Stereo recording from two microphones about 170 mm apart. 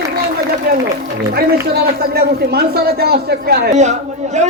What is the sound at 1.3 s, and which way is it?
A man's voice, 70° right (ahead or behind).